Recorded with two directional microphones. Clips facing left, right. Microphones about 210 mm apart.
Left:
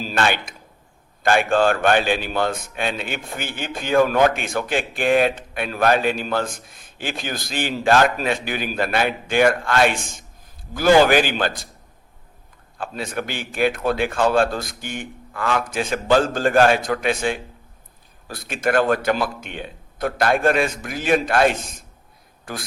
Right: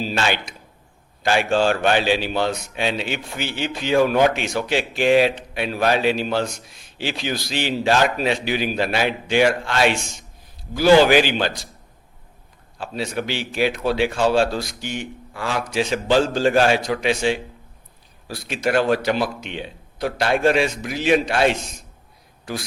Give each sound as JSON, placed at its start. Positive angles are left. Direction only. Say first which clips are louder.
{"t": 0.0, "sound": "a man's voice", "louder": "left 1 dB", "side_deg": 50}
{"t": 13.0, "sound": "a man's voice", "louder": "right 3 dB", "side_deg": 50}